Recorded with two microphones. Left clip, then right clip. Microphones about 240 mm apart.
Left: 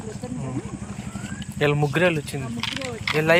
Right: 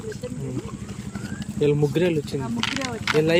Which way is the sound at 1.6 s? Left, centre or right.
Centre.